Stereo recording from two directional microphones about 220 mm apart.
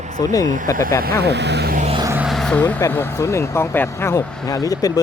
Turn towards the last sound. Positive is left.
turn(degrees=15)  # may be behind; listen again after turning